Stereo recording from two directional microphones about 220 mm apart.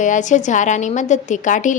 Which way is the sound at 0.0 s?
35° left (ahead or behind).